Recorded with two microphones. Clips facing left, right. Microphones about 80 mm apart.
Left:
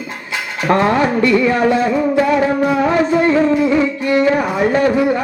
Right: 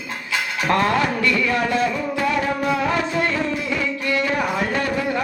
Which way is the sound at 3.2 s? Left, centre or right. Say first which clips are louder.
Left 10 dB; left.